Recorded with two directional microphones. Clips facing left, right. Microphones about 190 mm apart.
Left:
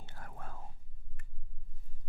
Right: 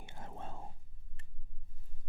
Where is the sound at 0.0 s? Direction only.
20° right (ahead or behind).